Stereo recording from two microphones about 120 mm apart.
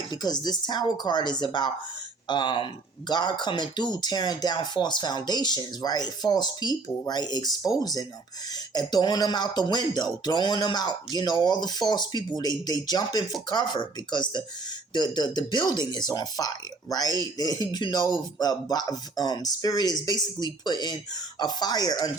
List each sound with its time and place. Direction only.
0.1 s speech: 35° left (ahead or behind)